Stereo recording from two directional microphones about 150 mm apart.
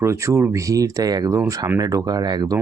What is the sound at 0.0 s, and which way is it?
Speech, 20° right (ahead or behind).